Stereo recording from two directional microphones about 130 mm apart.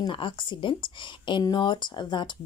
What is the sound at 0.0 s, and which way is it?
Speech, 40° left (ahead or behind).